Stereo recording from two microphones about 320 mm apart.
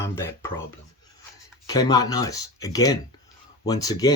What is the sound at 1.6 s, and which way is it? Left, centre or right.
Speech, centre.